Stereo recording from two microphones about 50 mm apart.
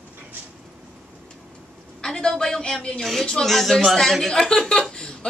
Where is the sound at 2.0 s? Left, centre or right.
Centre.